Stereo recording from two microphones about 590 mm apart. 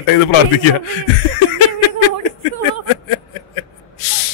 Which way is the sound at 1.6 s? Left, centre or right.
Left.